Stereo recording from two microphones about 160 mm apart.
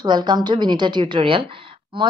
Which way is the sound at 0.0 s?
25° right (ahead or behind).